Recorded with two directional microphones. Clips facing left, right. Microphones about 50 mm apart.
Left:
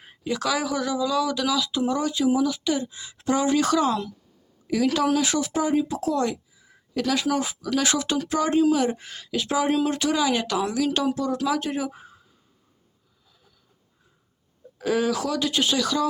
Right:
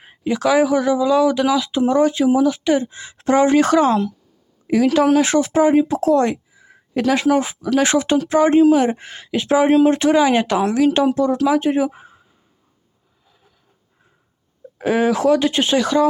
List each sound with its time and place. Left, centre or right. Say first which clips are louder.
0.0 s speech: right 7 dB; right
14.8 s speech: right 6 dB; right